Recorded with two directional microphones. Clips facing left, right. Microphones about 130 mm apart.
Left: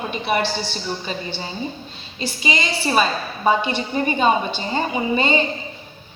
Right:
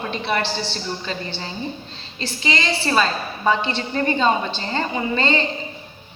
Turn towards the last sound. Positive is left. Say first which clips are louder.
# left 2 dB
turn(degrees=15)  # may be behind; listen again after turning